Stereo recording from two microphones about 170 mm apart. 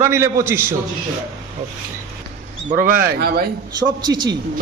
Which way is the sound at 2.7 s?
55° right (ahead or behind).